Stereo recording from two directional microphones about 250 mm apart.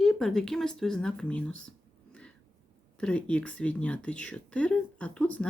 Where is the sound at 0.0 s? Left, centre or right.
Centre.